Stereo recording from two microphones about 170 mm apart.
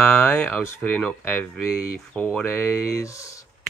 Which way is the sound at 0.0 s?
10° left (ahead or behind).